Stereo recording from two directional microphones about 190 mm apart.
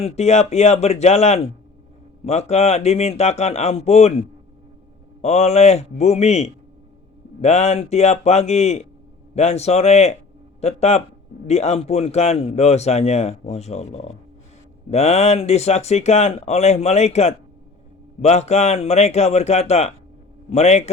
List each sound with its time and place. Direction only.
0.0 s speech: 35° left (ahead or behind)